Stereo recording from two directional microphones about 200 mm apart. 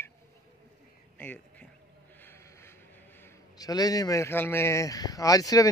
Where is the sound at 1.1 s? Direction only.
10° left (ahead or behind).